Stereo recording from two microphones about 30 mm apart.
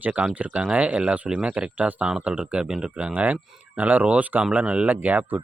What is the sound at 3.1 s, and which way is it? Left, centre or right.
Speech, right.